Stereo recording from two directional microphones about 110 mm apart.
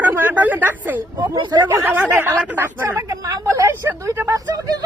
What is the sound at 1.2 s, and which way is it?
Speech, 40° right (ahead or behind).